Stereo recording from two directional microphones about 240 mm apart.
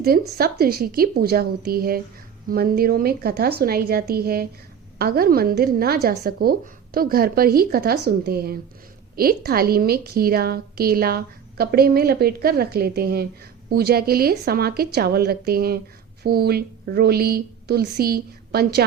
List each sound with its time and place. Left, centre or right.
0.0 s a woman's voice: right